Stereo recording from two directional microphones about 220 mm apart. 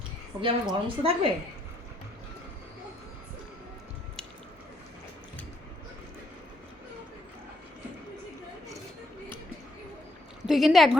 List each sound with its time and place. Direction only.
0.4 s a woman's voice: 20° right (ahead or behind)
10.4 s a woman's voice: centre (ahead or behind)